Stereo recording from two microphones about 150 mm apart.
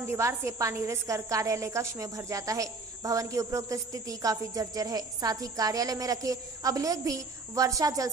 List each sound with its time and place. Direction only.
0.0 s a woman's voice: 15° right (ahead or behind)